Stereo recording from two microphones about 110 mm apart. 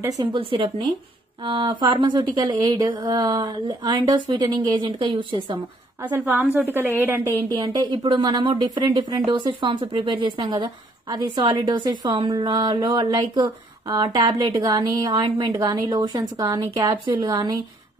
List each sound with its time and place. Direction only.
0.4 s a woman's voice: 55° right (ahead or behind)
6.0 s a woman's voice: 15° right (ahead or behind)
7.5 s a woman's voice: 45° right (ahead or behind)